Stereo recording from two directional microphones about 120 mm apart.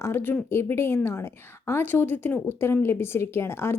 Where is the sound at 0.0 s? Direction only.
20° left (ahead or behind).